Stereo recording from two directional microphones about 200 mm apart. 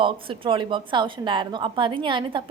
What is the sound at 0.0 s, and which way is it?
A woman's voice, 25° right (ahead or behind).